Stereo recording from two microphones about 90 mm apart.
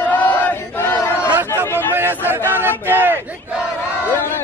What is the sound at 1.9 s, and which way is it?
A man's voice, 25° right (ahead or behind).